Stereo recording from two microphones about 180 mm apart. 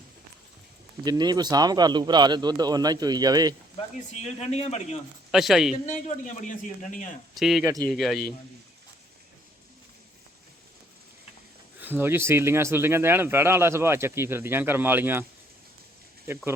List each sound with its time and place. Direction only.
1.0 s a man's voice: 20° right (ahead or behind)
4.2 s a man's voice: 35° left (ahead or behind)
5.3 s speech: centre (ahead or behind)
5.8 s a man's voice: 40° left (ahead or behind)
7.3 s speech: centre (ahead or behind)
7.6 s a man's voice: 20° right (ahead or behind)
7.9 s speech: centre (ahead or behind)
11.8 s speech: 10° right (ahead or behind)
16.2 s speech: 15° right (ahead or behind)